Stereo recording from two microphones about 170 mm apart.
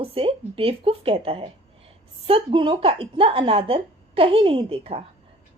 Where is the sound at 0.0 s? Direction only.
30° right (ahead or behind).